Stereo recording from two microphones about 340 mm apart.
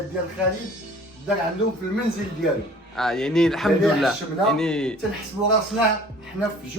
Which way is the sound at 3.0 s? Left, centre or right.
Centre.